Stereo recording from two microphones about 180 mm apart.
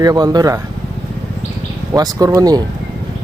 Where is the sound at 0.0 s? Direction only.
20° right (ahead or behind).